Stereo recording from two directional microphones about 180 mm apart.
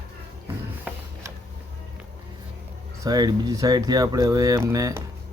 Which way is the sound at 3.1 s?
20° right (ahead or behind).